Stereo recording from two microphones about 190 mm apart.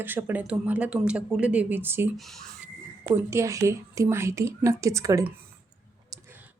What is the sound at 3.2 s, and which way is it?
A woman's voice, 15° right (ahead or behind).